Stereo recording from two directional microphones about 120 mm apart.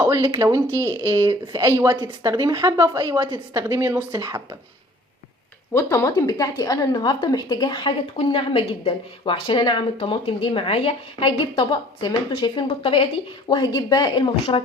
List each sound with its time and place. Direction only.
0.0 s a woman's voice: 20° right (ahead or behind)
5.7 s a woman's voice: 20° left (ahead or behind); by 13.1 s 50° left (ahead or behind)
13.5 s a woman's voice: 35° left (ahead or behind)